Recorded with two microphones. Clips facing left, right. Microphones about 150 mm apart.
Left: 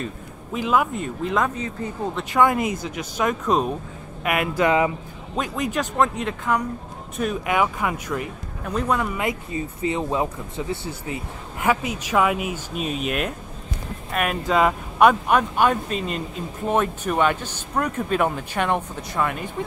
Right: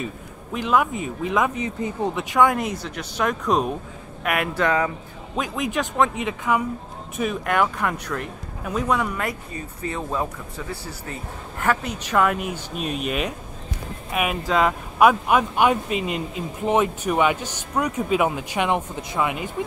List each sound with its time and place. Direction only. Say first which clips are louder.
0.0 s speech: even; centre (ahead or behind)
1.6 s speech: right 3 dB; 15° right (ahead or behind)
2.2 s speech: left 1 dB; centre (ahead or behind)
9.8 s speech: left 3 dB; 20° left (ahead or behind)
11.6 s speech: left 1 dB; 10° left (ahead or behind); by 19.5 s 10° right (ahead or behind)